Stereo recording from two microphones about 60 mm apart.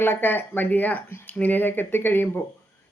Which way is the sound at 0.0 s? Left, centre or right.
Left.